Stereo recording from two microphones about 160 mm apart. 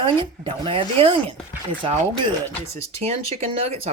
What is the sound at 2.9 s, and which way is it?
Speech, 40° right (ahead or behind).